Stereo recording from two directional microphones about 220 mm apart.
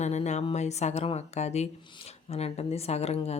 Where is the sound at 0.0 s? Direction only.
30° left (ahead or behind).